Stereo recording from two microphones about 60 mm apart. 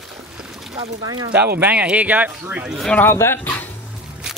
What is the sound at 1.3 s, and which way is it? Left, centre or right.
Speech, right.